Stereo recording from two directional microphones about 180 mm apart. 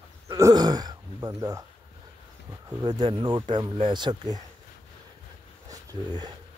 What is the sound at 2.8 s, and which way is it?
Speech, 25° right (ahead or behind).